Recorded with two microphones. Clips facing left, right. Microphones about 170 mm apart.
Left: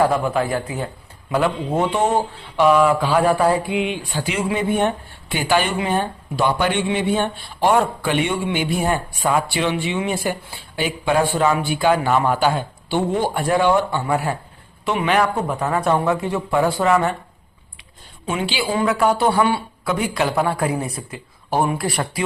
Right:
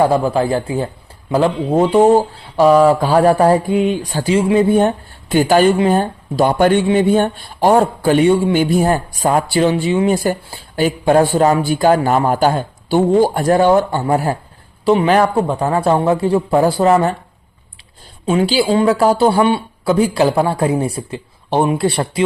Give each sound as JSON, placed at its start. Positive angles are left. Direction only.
{"t": 0.0, "sound": "speech", "side_deg": -30}
{"t": 18.3, "sound": "speech", "side_deg": -35}